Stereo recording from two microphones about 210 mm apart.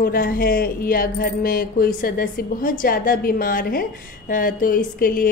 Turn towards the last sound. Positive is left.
turn(degrees=45)  # may be behind; listen again after turning